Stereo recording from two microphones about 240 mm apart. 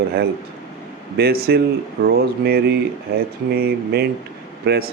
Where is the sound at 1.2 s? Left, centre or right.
Right.